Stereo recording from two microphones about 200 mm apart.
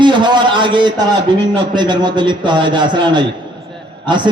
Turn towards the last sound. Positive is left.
turn(degrees=-25)  # may be behind; listen again after turning